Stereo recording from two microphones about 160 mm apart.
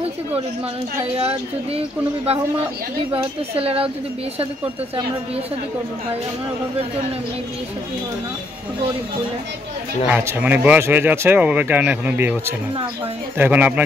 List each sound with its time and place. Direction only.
1.1 s speech: 35° right (ahead or behind)
3.5 s speech: 35° right (ahead or behind)
10.0 s speech: 10° right (ahead or behind)